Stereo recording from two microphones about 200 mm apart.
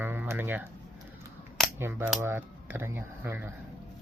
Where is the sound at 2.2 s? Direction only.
10° right (ahead or behind).